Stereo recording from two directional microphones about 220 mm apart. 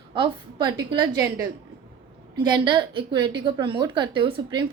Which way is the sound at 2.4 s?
20° right (ahead or behind).